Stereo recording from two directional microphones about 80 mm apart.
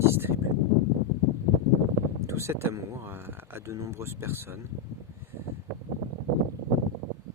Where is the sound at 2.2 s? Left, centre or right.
Right.